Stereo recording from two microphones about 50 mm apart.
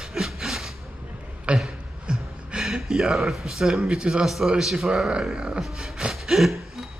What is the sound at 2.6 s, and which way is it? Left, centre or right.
Speech, centre.